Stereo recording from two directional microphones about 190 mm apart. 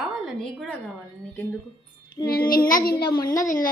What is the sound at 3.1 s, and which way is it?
Speech, 20° left (ahead or behind).